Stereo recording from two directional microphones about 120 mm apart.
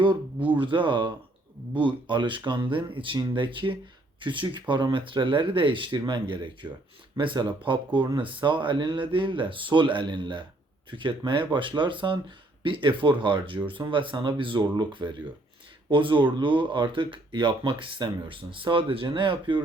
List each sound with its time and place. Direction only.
0.3 s speech: 15° right (ahead or behind)
0.6 s speech: 40° right (ahead or behind)